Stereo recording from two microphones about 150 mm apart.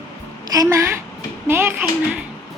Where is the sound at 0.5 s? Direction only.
20° right (ahead or behind).